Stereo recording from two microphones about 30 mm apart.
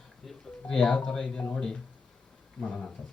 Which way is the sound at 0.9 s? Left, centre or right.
Left.